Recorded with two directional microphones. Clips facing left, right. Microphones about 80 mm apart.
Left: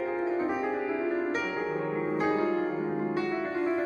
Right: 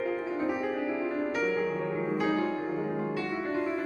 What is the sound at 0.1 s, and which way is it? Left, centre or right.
Music, left.